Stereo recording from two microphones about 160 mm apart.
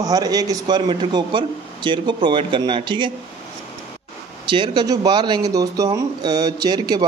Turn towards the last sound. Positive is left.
turn(degrees=-25)  # may be behind; listen again after turning